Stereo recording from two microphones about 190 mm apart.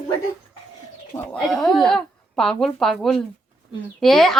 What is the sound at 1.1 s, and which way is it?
Speech, 5° left (ahead or behind).